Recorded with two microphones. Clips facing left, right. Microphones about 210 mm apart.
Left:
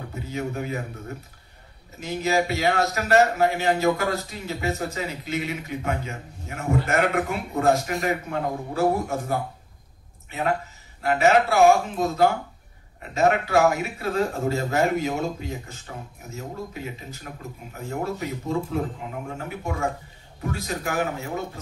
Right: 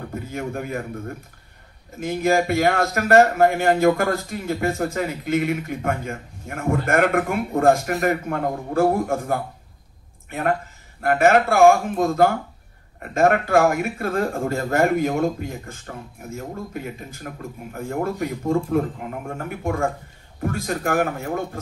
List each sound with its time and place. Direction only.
0.1 s a man's voice: 55° right (ahead or behind)